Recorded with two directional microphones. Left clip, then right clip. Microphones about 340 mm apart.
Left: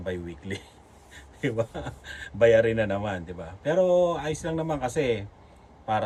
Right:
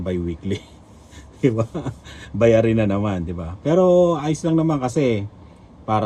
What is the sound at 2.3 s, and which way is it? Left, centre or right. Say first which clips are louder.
Speech: right 3 dB; left.